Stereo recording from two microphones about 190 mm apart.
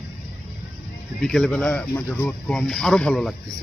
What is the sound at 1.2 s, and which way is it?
Speech, centre (ahead or behind).